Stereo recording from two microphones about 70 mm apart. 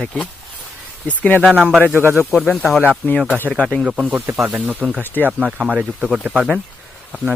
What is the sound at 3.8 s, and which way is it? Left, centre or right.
Speech, centre.